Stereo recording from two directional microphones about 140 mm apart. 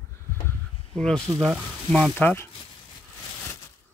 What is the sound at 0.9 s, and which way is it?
Speech, 5° left (ahead or behind).